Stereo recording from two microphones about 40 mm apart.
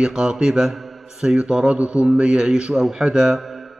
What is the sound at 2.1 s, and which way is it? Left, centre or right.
Speech, right.